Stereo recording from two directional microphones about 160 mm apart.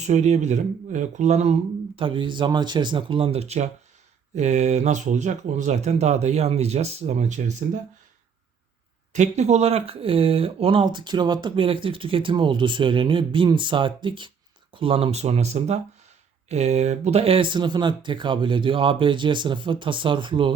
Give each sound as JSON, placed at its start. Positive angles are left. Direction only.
{"t": 0.0, "sound": "speech", "side_deg": -45}
{"t": 2.0, "sound": "speech", "side_deg": -30}
{"t": 9.1, "sound": "speech", "side_deg": -45}